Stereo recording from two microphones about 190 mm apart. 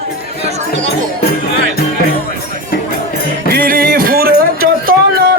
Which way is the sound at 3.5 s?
50° right (ahead or behind).